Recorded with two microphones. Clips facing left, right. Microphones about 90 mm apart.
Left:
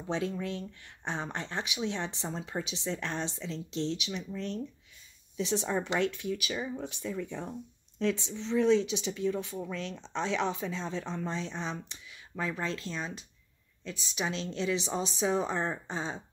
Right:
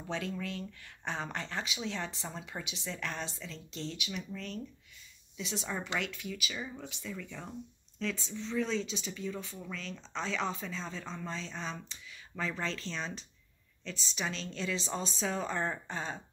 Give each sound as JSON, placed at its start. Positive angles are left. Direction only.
{"t": 0.1, "sound": "a woman's voice", "side_deg": 25}